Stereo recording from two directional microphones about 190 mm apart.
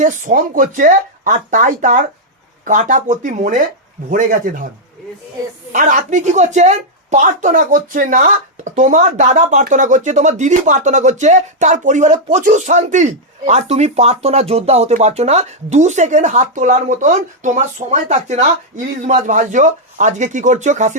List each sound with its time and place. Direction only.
0.0 s speech: 45° right (ahead or behind)
5.7 s speech: 40° right (ahead or behind)